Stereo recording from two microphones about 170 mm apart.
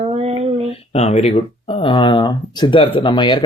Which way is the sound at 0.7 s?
35° left (ahead or behind).